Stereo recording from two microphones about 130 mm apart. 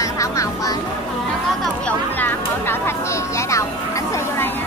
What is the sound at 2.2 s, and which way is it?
Speech, 15° left (ahead or behind).